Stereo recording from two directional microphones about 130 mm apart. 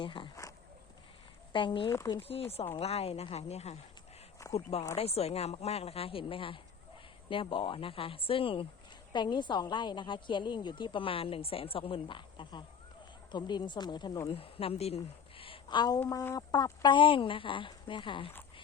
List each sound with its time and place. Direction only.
0.0 s a woman's voice: 40° left (ahead or behind)
1.5 s a woman's voice: 40° left (ahead or behind)
1.9 s speech: 20° left (ahead or behind)
2.1 s a woman's voice: 45° left (ahead or behind)
14.3 s a woman's voice: 45° left (ahead or behind)